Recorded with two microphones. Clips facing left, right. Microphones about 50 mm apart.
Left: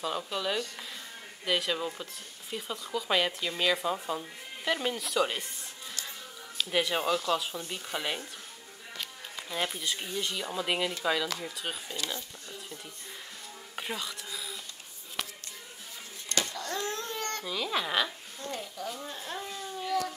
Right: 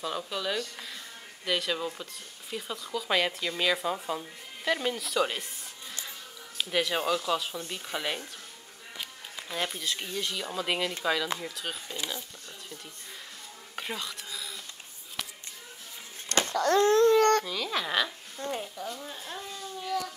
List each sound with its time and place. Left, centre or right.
0.0 s speech: centre
6.7 s speech: centre
9.5 s speech: centre
13.7 s a sound: centre
16.5 s babbling: right
17.5 s speech: centre
18.4 s speech: right
18.9 s a sound: centre